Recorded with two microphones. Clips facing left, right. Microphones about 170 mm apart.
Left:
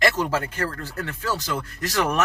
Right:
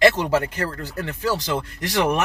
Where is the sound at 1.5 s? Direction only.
25° right (ahead or behind).